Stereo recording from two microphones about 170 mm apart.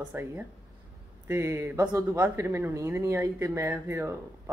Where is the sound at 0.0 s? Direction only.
10° right (ahead or behind).